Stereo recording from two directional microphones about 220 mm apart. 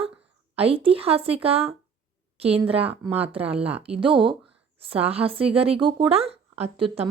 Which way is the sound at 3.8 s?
25° right (ahead or behind).